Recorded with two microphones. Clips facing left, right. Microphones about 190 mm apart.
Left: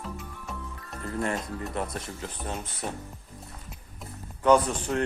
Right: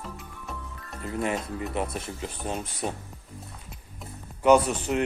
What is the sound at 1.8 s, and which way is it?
Speech, 15° right (ahead or behind).